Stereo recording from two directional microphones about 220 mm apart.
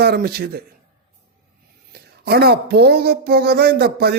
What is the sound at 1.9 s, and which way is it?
Speech, 45° right (ahead or behind).